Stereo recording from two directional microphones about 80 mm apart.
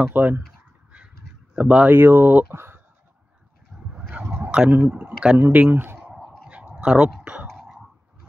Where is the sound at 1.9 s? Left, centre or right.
Right.